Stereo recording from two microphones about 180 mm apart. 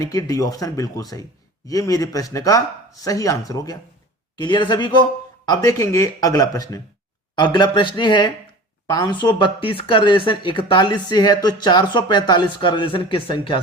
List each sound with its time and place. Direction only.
0.0 s speech: 20° left (ahead or behind)